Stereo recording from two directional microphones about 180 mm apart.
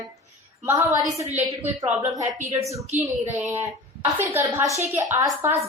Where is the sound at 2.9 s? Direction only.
45° right (ahead or behind).